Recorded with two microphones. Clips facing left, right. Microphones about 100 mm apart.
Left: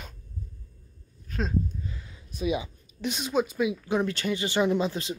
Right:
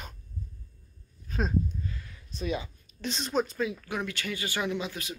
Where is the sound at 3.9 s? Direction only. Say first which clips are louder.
Left 7 dB; 30° left (ahead or behind).